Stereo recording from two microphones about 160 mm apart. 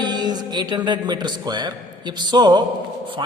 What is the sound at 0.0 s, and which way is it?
Music, 25° right (ahead or behind).